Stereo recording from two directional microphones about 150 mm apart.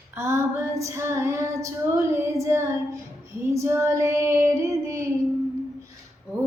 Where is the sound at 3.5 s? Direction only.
20° right (ahead or behind).